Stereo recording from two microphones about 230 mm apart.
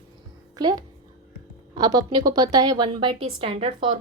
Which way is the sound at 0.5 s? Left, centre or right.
Centre.